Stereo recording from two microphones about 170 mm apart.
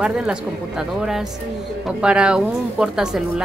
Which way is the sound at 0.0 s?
5° right (ahead or behind).